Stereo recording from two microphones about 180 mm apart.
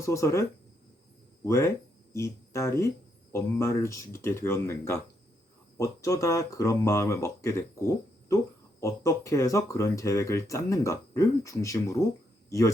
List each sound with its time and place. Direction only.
0.0 s speech: 15° left (ahead or behind)
1.5 s speech: 15° left (ahead or behind)